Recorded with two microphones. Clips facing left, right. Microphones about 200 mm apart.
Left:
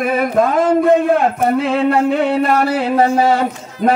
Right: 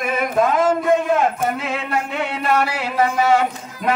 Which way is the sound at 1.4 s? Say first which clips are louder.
Left 9 dB; 35° left (ahead or behind).